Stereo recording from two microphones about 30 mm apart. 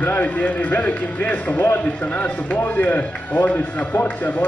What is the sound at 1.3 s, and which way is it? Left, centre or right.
Speech, left.